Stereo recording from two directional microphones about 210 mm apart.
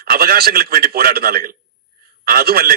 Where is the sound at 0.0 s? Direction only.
45° right (ahead or behind).